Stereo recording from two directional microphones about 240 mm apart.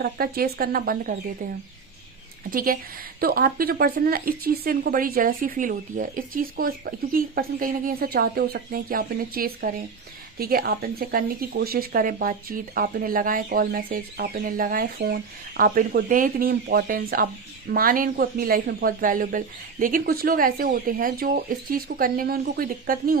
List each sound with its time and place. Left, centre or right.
0.0 s speech: right
2.5 s speech: right